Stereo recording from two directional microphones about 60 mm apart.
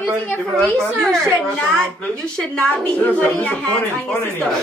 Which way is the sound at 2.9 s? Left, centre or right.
Left.